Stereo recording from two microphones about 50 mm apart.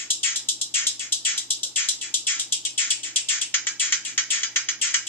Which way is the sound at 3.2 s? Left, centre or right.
Left.